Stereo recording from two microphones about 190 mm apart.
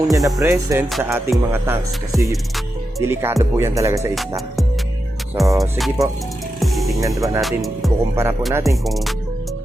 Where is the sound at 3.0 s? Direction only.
15° right (ahead or behind).